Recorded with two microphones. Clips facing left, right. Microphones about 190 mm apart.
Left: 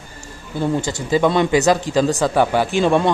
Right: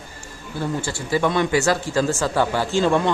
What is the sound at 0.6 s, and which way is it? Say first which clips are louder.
Speech: left 5 dB; 20° left (ahead or behind).